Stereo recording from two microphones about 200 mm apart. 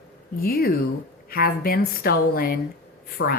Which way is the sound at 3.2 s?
70° left (ahead or behind).